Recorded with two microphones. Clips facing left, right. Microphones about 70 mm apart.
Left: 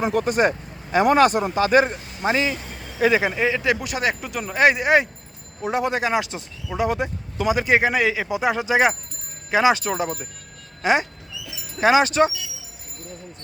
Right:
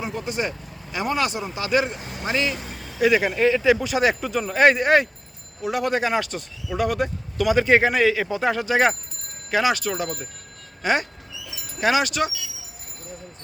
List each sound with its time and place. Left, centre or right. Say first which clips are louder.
0.1 s speech: left 8 dB; left
2.2 s speech: left 3 dB; left
3.3 s speech: right 3 dB; centre
5.6 s a man's voice: left 1 dB; left